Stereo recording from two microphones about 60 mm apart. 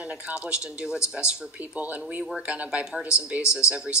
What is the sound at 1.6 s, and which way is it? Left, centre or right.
Speech, right.